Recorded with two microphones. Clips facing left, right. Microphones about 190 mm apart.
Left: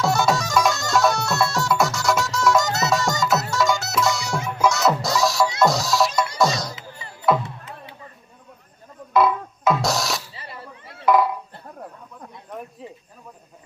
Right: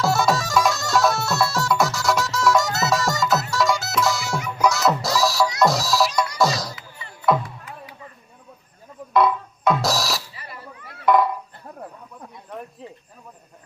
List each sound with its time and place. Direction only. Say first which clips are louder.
0.0 s music: even; centre (ahead or behind)
4.4 s music: left 1 dB; 25° left (ahead or behind)
4.6 s music: even; centre (ahead or behind)
7.4 s music: left 1 dB; 25° left (ahead or behind)
9.1 s music: even; centre (ahead or behind)
10.8 s music: even; 30° left (ahead or behind)
11.0 s a sound: even; centre (ahead or behind)